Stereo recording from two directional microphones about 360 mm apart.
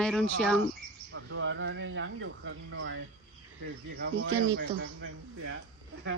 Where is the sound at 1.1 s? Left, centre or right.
Right.